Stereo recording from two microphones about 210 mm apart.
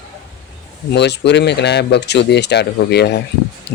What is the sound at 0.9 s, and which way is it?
Speech, 55° left (ahead or behind).